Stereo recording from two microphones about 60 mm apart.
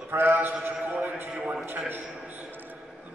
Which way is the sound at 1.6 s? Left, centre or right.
Right.